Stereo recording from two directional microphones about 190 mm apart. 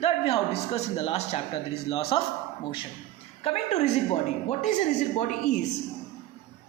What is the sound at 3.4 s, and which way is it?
A man's voice, 35° left (ahead or behind).